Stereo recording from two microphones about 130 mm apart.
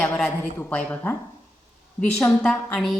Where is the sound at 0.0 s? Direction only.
15° left (ahead or behind).